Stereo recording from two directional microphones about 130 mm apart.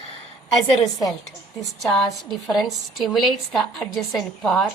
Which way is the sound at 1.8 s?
Centre (ahead or behind).